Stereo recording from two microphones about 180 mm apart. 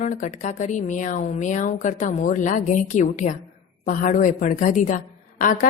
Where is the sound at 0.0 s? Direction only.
45° left (ahead or behind).